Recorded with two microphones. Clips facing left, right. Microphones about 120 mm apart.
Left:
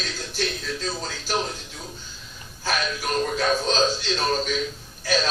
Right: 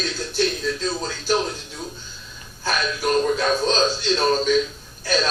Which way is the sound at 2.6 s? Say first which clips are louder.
Right 3 dB; 45° right (ahead or behind).